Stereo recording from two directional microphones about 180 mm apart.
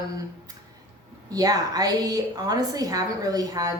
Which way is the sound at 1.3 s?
20° right (ahead or behind).